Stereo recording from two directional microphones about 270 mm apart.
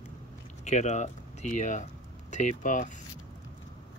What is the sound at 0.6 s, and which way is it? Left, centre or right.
Speech, left.